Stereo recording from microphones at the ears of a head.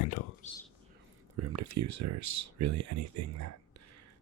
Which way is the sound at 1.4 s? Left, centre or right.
Right.